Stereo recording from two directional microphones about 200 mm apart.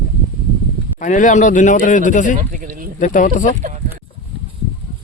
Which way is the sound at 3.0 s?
40° left (ahead or behind).